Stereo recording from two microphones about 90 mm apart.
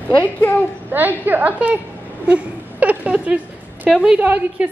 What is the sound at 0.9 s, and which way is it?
Speech, 20° right (ahead or behind).